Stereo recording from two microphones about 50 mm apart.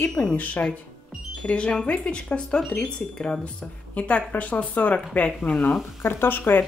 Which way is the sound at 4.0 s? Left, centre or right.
Left.